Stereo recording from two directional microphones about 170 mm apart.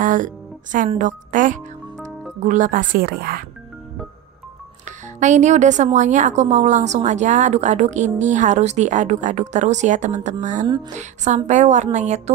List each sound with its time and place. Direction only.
0.0 s music: 50° right (ahead or behind)
0.9 s speech: 50° right (ahead or behind)
4.8 s speech: 45° right (ahead or behind)